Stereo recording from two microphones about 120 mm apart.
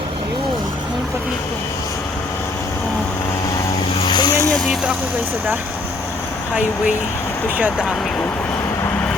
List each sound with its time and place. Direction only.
4.0 s vehicle: 35° left (ahead or behind)
4.5 s speech: centre (ahead or behind)
7.6 s speech: 5° right (ahead or behind)